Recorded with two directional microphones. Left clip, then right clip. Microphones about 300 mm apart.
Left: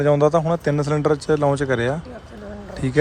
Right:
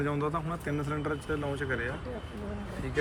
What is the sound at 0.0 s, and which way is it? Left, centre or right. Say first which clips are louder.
Speech: left 15 dB; centre.